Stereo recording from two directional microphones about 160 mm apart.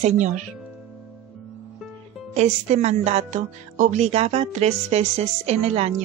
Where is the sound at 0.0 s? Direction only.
50° right (ahead or behind).